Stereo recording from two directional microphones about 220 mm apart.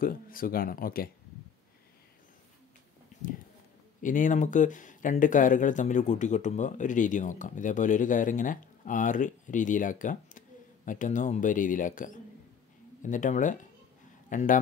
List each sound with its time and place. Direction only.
0.0 s speech: 40° left (ahead or behind)
4.0 s speech: 35° left (ahead or behind)